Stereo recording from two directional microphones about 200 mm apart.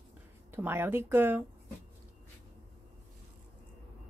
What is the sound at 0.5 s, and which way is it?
Speech, 10° right (ahead or behind).